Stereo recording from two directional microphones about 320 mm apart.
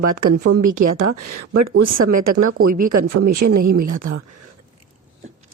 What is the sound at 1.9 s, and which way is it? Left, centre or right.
Speech, right.